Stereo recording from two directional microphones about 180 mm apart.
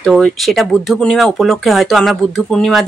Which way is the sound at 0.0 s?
Centre (ahead or behind).